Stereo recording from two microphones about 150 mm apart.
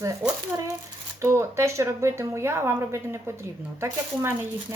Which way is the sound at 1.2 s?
20° right (ahead or behind).